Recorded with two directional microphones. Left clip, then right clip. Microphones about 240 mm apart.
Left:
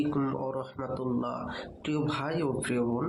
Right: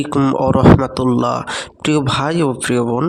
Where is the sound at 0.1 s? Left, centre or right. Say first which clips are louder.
Right 16 dB; right.